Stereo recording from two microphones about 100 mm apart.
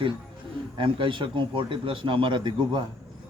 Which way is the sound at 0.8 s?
60° right (ahead or behind).